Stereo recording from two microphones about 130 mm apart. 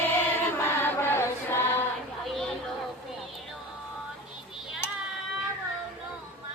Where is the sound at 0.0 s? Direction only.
15° left (ahead or behind).